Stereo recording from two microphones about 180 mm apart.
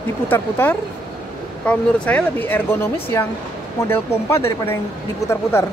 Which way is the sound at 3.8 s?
15° left (ahead or behind).